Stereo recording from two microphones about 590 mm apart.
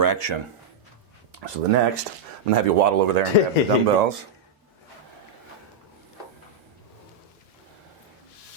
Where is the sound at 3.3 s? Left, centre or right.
Left.